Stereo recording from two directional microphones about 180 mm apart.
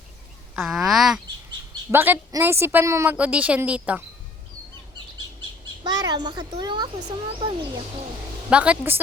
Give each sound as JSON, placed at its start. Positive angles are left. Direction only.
{"t": 0.5, "sound": "speech", "side_deg": 0}
{"t": 1.9, "sound": "a woman's voice", "side_deg": -15}
{"t": 5.8, "sound": "a child's voice", "side_deg": -20}
{"t": 8.4, "sound": "a woman's voice", "side_deg": -5}